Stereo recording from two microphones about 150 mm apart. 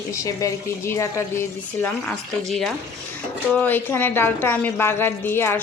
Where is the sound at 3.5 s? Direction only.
10° left (ahead or behind).